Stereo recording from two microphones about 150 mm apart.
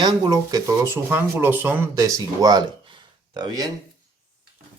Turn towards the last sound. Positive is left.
turn(degrees=-25)  # may be behind; listen again after turning